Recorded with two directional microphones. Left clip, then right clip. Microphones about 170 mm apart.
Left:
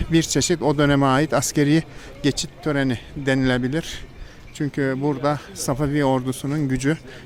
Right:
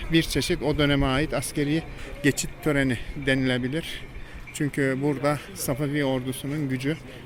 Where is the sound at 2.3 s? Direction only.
20° right (ahead or behind).